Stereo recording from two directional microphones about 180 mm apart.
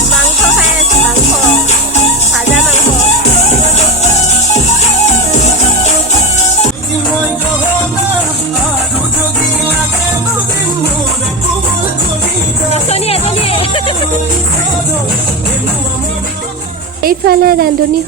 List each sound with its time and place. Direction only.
4.5 s music: 40° left (ahead or behind)
12.7 s music: 35° left (ahead or behind)
17.0 s music: 55° right (ahead or behind)